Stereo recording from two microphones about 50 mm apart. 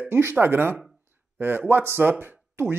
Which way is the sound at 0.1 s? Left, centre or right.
Right.